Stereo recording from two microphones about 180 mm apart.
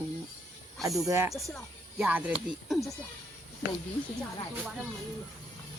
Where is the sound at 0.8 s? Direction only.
20° right (ahead or behind).